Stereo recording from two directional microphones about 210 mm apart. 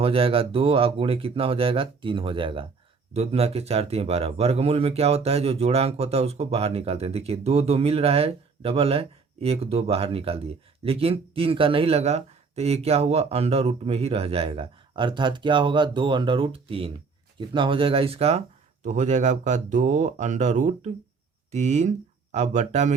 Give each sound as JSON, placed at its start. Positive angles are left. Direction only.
{"t": 0.0, "sound": "speech", "side_deg": -25}